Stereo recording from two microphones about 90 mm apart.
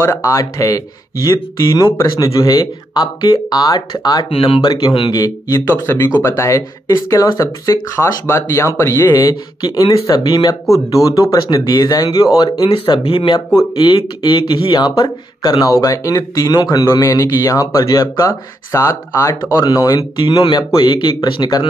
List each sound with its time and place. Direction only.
0.0 s speech: 35° left (ahead or behind)
4.3 s speech: 90° left
4.6 s speech: 65° left (ahead or behind)
5.1 s speech: 40° left (ahead or behind)
9.3 s speech: 55° left (ahead or behind); by 11.3 s 40° left (ahead or behind)
11.5 s speech: 55° left (ahead or behind)
12.6 s speech: 80° left; by 15.5 s 50° left (ahead or behind)
15.6 s speech: 40° left (ahead or behind)
19.6 s speech: 50° left (ahead or behind)